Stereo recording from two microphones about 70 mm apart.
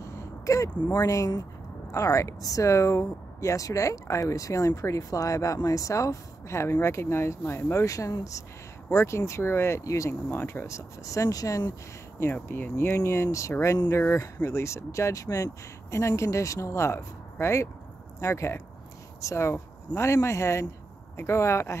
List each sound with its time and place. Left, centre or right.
0.0 s a sound: left
0.9 s speech: left
7.7 s speech: left
10.3 s speech: left
11.1 s speech: left
12.4 s speech: left
12.9 s speech: left